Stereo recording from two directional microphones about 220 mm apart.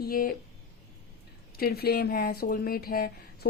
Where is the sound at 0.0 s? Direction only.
40° left (ahead or behind).